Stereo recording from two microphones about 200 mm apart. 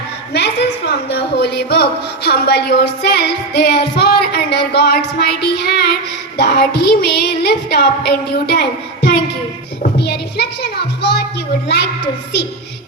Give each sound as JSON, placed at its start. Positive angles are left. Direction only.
{"t": 0.3, "sound": "a woman's voice", "side_deg": 55}